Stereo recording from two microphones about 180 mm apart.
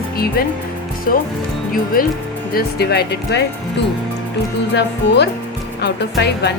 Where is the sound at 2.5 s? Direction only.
65° left (ahead or behind).